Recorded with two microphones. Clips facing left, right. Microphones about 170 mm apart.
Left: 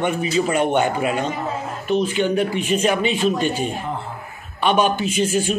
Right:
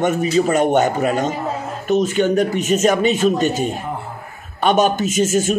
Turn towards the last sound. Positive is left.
turn(degrees=-45)  # may be behind; listen again after turning